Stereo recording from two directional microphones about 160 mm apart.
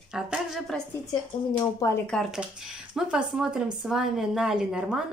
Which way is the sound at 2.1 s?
5° right (ahead or behind).